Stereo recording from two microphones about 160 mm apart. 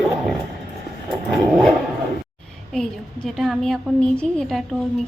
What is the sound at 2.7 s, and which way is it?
A woman's voice, 5° left (ahead or behind).